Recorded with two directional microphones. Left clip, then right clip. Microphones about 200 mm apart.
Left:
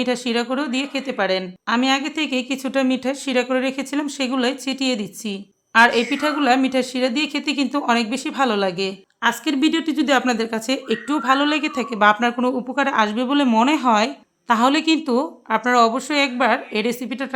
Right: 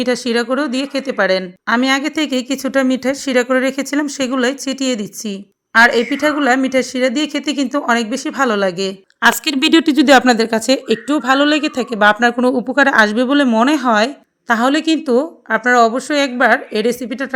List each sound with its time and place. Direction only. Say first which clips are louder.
0.0 s a woman's voice: right 5 dB; 20° right (ahead or behind)
9.2 s a woman's voice: right 6 dB; 40° right (ahead or behind); by 17.2 s 15° right (ahead or behind)